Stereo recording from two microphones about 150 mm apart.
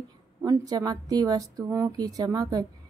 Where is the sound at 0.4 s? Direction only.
25° right (ahead or behind).